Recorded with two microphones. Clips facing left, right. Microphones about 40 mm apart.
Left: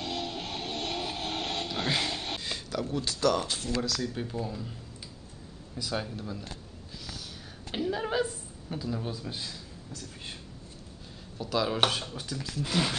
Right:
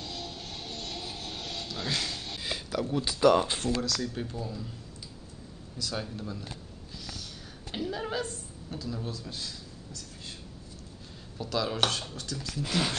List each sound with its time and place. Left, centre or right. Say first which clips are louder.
0.0 s music: left 6 dB; left
1.9 s speech: left 2 dB; left
2.4 s speech: right 1 dB; centre; by 3.5 s right
3.8 s speech: even; centre
4.4 s speech: left 2 dB; centre
5.8 s speech: left 2 dB; centre
6.1 s speech: even; centre
7.7 s a sound: left 3 dB; centre
11.3 s speech: left 2 dB; centre
12.5 s speech: left 1 dB; centre